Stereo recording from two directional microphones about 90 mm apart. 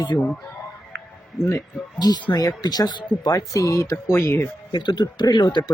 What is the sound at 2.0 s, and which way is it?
Speech, 50° left (ahead or behind).